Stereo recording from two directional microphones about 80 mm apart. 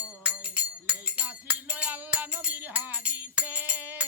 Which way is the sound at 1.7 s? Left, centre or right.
Centre.